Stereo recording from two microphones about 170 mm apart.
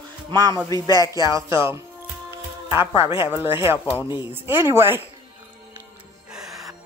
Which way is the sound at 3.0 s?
30° left (ahead or behind).